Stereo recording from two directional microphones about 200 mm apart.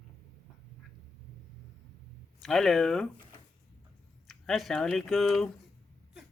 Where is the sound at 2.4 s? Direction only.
Centre (ahead or behind).